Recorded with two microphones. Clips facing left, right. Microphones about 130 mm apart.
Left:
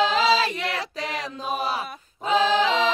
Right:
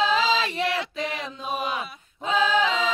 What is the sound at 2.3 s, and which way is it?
A capella, 35° left (ahead or behind).